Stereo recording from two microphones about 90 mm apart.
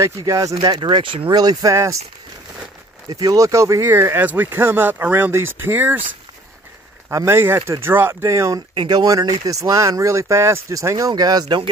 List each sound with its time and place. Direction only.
0.3 s speech: 40° right (ahead or behind)
0.7 s speech: 65° right (ahead or behind)
1.3 s speech: 50° right (ahead or behind)
1.7 s speech: 35° right (ahead or behind)
3.1 s speech: 45° right (ahead or behind); by 6.0 s 20° right (ahead or behind)
7.1 s speech: 30° right (ahead or behind)
8.7 s speech: 50° right (ahead or behind)